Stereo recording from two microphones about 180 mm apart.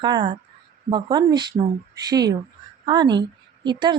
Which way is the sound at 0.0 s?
25° right (ahead or behind).